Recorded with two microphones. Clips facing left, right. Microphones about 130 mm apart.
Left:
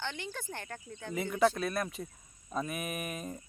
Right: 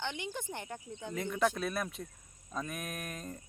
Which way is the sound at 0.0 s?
15° right (ahead or behind).